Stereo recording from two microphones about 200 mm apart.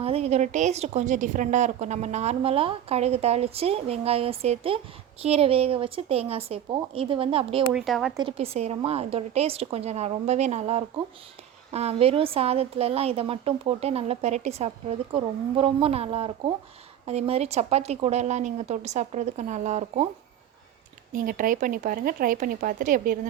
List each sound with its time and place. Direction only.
0.0 s a woman's voice: 30° right (ahead or behind)
7.7 s speech: centre (ahead or behind)
8.1 s a woman's voice: 25° right (ahead or behind)
21.1 s speech: 45° right (ahead or behind)